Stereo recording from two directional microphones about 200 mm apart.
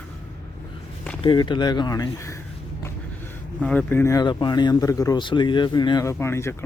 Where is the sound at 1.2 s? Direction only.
25° left (ahead or behind).